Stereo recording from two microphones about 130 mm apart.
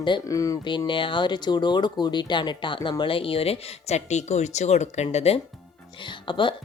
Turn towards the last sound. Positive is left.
turn(degrees=40)  # may be behind; listen again after turning